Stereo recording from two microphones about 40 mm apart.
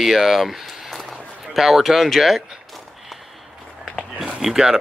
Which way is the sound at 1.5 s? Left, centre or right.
Centre.